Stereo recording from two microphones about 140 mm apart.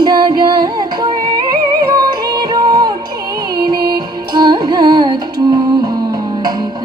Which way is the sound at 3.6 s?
30° right (ahead or behind).